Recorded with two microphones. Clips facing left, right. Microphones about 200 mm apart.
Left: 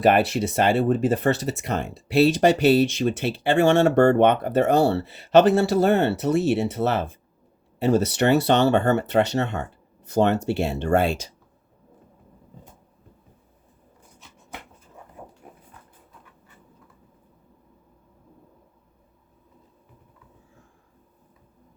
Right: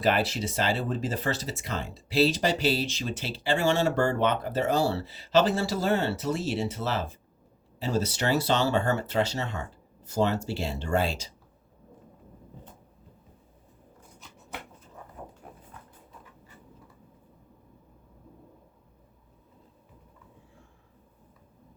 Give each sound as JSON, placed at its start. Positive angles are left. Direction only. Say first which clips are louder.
{"t": 0.0, "sound": "speech", "louder": "left 7 dB", "side_deg": 60}